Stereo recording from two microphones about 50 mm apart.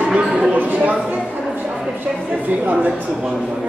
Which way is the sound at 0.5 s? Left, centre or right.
Right.